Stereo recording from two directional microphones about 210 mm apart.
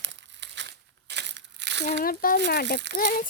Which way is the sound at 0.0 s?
60° right (ahead or behind).